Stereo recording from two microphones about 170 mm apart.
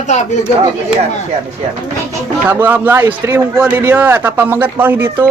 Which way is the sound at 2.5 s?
10° right (ahead or behind).